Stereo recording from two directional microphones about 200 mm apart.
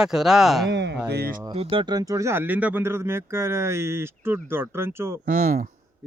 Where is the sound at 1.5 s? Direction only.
25° right (ahead or behind); by 5.2 s 10° right (ahead or behind).